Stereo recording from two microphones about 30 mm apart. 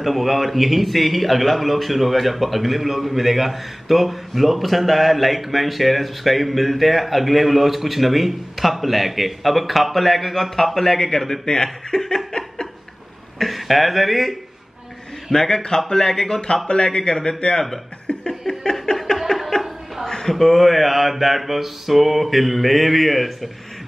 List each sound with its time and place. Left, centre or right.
0.0 s a man's voice: centre
12.3 s chuckle: left
13.4 s speech: centre
15.3 s speech: centre
16.6 s speech: left
18.1 s laughter: left
18.5 s a sound: left
19.3 s chuckle: left
20.2 s a man's voice: centre